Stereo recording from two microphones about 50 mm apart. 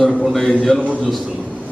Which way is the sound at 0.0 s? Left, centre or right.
Centre.